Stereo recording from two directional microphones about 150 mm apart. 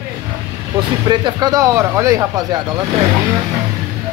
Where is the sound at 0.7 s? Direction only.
30° right (ahead or behind).